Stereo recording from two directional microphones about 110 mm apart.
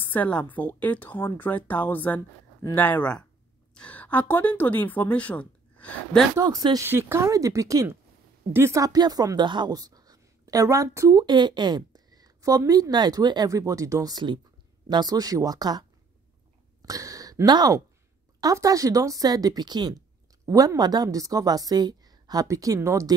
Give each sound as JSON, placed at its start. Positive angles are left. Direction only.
{"t": 0.0, "sound": "speech", "side_deg": 15}
{"t": 6.4, "sound": "speech", "side_deg": -35}
{"t": 6.9, "sound": "speech", "side_deg": -20}
{"t": 16.8, "sound": "speech", "side_deg": -30}